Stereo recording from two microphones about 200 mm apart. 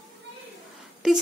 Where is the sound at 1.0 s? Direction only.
Centre (ahead or behind).